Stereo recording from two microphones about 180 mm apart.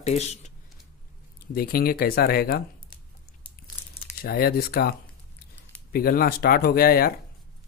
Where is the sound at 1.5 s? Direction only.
55° left (ahead or behind).